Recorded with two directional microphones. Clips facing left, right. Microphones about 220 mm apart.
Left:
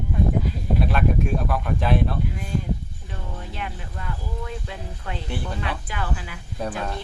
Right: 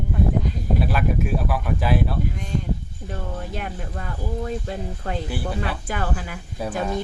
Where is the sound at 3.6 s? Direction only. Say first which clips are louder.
Right 3 dB; 45° right (ahead or behind).